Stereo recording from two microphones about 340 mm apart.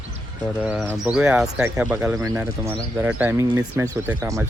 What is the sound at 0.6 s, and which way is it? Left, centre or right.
Speech, centre.